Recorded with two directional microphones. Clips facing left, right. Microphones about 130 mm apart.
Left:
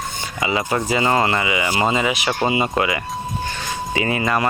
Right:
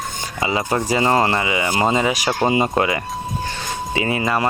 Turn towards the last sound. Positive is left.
turn(degrees=-25)  # may be behind; listen again after turning